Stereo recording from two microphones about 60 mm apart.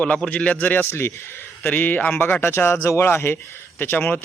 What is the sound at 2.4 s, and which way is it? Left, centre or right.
Speech, left.